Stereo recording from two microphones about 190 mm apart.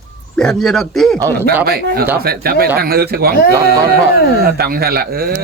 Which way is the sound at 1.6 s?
55° right (ahead or behind).